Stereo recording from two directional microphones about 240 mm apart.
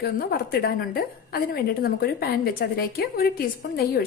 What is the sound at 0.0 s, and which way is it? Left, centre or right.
A woman's voice, left.